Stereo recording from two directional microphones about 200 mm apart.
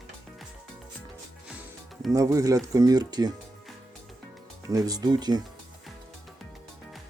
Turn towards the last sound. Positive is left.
turn(degrees=-20)  # may be behind; listen again after turning